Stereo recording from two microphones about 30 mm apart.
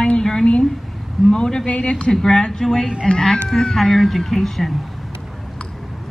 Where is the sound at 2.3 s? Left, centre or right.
Left.